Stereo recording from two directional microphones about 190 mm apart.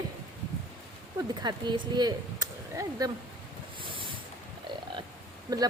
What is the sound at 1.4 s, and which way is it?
Speech, 25° right (ahead or behind).